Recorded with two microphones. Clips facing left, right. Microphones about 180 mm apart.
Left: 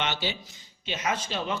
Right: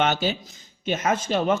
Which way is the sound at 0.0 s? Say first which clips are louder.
Right 8 dB; 45° right (ahead or behind).